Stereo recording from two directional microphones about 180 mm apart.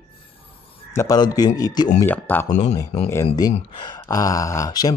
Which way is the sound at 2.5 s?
40° left (ahead or behind).